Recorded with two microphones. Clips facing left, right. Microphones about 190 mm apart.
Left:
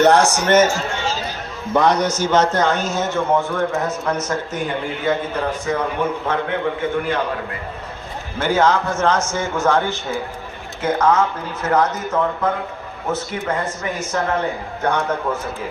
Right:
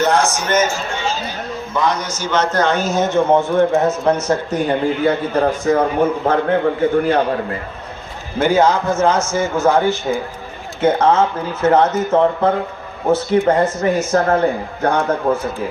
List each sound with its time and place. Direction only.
0.0 s a man's voice: 65° left (ahead or behind)
1.7 s a man's voice: 60° left (ahead or behind)
2.7 s speech: 10° right (ahead or behind); by 4.2 s 30° right (ahead or behind)
5.0 s a man's voice: 40° right (ahead or behind)
8.4 s a man's voice: 10° right (ahead or behind)
10.8 s a man's voice: 30° right (ahead or behind)